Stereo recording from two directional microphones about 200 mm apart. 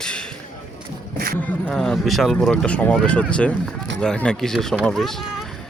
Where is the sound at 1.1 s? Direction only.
50° right (ahead or behind).